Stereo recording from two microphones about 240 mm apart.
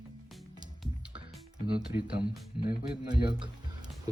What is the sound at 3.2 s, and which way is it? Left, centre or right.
Speech, centre.